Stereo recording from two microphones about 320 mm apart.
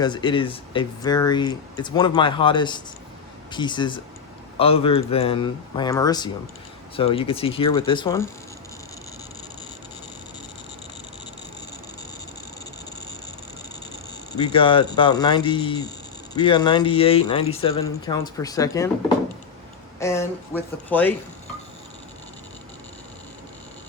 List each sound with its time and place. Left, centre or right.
0.0 s speech: centre
14.5 s speech: centre